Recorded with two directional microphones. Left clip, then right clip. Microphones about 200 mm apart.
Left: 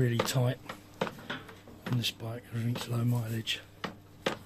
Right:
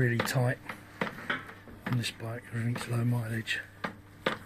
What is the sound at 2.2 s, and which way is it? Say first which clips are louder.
Speech: right 2 dB; 15° left (ahead or behind).